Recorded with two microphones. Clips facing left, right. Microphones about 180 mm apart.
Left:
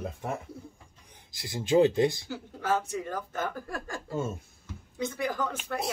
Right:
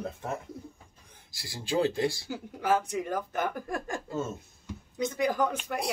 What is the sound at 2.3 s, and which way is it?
Speech, 15° right (ahead or behind).